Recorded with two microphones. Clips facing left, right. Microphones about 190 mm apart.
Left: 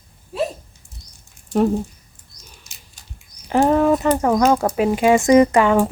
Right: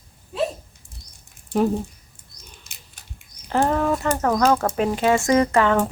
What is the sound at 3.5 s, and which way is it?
Speech, 15° left (ahead or behind).